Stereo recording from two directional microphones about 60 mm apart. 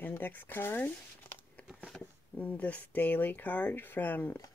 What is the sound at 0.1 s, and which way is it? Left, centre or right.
Speech, left.